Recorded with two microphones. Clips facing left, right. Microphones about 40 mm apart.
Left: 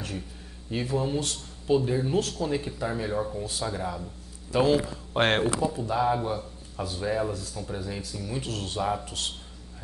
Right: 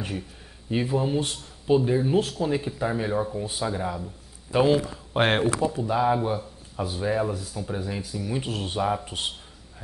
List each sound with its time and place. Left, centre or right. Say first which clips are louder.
0.7 s speech: right 3 dB; centre